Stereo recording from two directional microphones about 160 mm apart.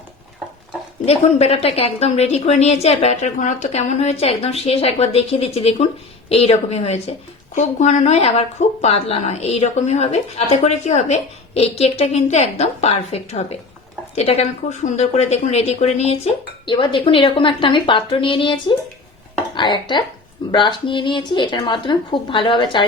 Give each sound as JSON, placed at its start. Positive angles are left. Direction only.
{"t": 1.0, "sound": "a woman's voice", "side_deg": 40}